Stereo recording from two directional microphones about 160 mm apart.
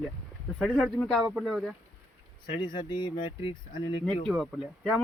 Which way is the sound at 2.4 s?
30° left (ahead or behind).